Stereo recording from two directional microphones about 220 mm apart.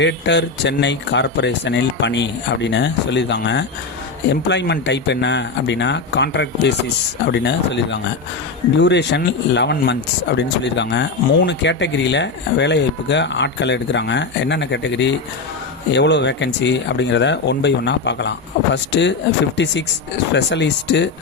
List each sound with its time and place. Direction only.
0.0 s speech: 50° left (ahead or behind)